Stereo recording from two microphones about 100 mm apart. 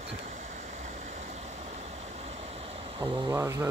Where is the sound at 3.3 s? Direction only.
30° right (ahead or behind).